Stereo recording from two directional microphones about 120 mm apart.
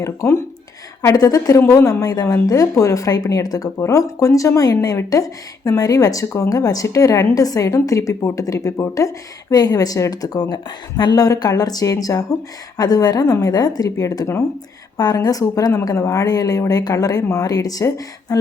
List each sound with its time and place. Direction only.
0.0 s a woman's voice: 25° left (ahead or behind)